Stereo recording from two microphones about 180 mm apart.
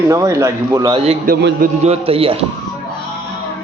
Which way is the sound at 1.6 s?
35° right (ahead or behind).